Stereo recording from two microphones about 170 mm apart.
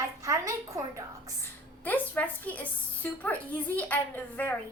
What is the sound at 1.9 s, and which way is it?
Speech, 10° left (ahead or behind).